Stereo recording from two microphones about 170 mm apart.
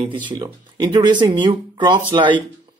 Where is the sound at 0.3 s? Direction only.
25° right (ahead or behind).